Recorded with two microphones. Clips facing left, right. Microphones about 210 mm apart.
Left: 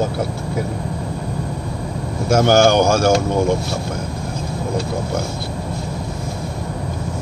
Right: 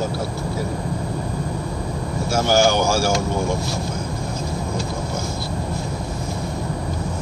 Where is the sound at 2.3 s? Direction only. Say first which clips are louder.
Left 5 dB; 55° left (ahead or behind).